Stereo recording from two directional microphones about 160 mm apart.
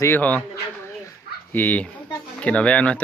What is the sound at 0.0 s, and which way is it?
Speech, 10° left (ahead or behind).